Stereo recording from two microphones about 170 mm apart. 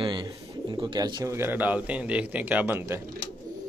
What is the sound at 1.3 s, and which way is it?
A man's voice, 10° right (ahead or behind).